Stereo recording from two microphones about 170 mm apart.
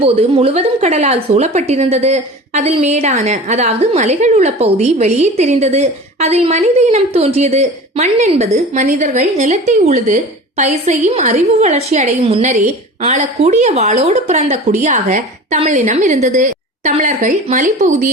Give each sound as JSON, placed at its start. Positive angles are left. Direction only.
{"t": 0.0, "sound": "a woman's voice", "side_deg": -35}